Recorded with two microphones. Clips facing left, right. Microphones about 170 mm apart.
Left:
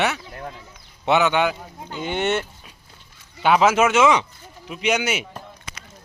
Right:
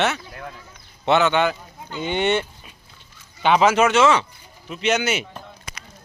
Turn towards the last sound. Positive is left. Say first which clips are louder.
# right 1 dB
turn(degrees=5)  # may be behind; listen again after turning